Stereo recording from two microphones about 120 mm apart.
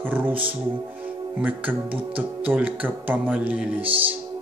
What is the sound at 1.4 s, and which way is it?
Speech, 15° right (ahead or behind).